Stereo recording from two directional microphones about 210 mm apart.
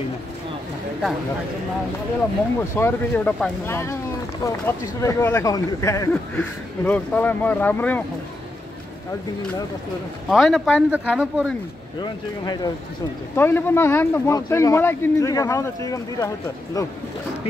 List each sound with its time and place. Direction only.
2.7 s speech: 10° left (ahead or behind)
10.2 s speech: centre (ahead or behind)
12.0 s speech: 20° left (ahead or behind)